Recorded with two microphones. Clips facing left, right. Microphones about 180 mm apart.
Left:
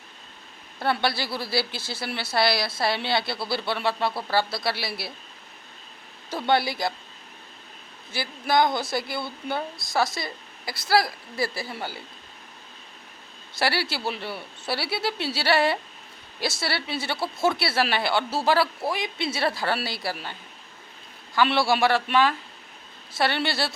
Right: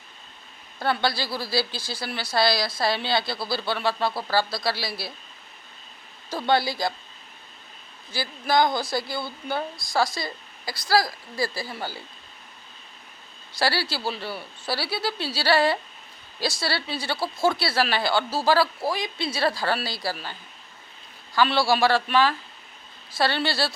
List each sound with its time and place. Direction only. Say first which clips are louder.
0.8 s a woman's voice: even; 25° left (ahead or behind)
6.5 s a woman's voice: even; 25° left (ahead or behind)
8.1 s a woman's voice: even; 25° left (ahead or behind)
13.5 s a woman's voice: even; 25° left (ahead or behind)
21.3 s a woman's voice: even; 20° left (ahead or behind)